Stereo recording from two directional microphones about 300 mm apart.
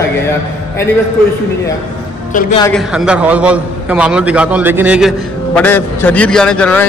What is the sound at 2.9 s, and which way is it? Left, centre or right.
A man's voice, centre.